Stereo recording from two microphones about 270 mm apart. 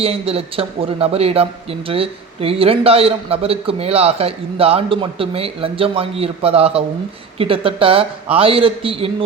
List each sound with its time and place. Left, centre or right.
0.0 s a man's voice: right